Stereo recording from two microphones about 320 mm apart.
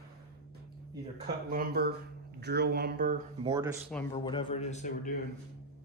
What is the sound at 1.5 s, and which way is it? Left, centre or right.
Speech, right.